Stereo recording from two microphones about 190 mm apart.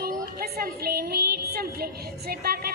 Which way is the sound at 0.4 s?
55° right (ahead or behind).